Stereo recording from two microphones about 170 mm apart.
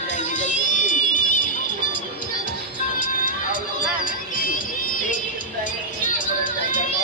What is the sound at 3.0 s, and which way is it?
Music, 55° left (ahead or behind).